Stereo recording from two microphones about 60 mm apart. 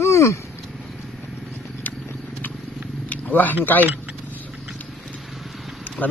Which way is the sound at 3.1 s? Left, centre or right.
Left.